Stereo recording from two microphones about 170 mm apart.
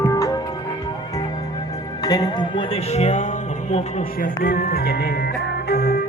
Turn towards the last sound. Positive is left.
turn(degrees=65)  # may be behind; listen again after turning